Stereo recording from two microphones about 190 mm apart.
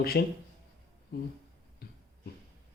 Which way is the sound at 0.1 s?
55° left (ahead or behind).